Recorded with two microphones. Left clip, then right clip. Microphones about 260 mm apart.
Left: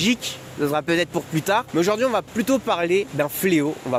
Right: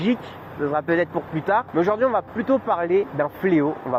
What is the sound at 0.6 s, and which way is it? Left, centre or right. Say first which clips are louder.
Speech: even; left.